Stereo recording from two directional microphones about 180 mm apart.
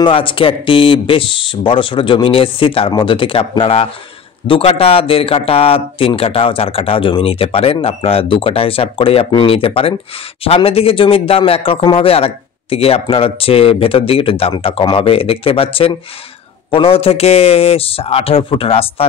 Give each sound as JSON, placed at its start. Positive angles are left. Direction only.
{"t": 0.0, "sound": "a man's voice", "side_deg": 30}